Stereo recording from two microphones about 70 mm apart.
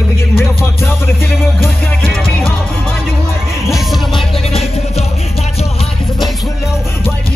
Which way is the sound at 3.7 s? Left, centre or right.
Centre.